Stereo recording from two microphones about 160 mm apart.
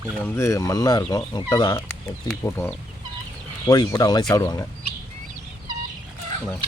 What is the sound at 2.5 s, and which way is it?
Speech, 15° left (ahead or behind).